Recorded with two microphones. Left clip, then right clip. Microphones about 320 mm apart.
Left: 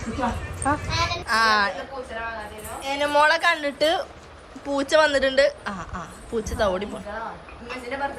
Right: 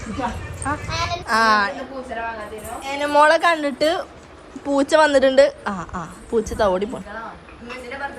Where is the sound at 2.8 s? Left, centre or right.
Centre.